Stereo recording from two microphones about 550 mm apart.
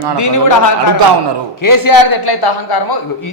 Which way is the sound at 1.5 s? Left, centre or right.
Left.